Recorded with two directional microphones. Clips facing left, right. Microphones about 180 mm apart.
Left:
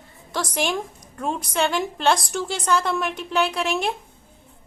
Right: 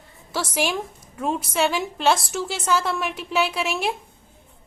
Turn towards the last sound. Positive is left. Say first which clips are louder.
# left 1 dB
turn(degrees=0)  # may be behind; listen again after turning